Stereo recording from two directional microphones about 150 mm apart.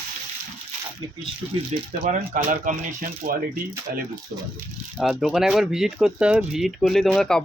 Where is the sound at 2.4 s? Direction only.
65° right (ahead or behind).